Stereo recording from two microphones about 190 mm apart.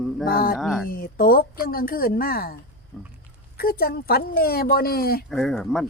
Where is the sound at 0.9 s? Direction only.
50° left (ahead or behind).